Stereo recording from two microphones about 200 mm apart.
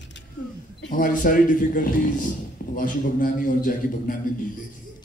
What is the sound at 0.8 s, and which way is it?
A man's voice, 40° left (ahead or behind).